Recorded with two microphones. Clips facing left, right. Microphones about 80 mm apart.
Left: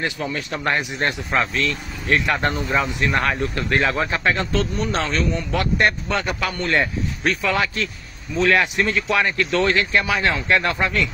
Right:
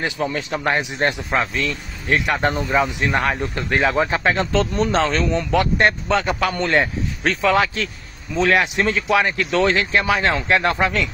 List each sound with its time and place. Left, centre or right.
0.2 s speech: right
0.5 s speech: right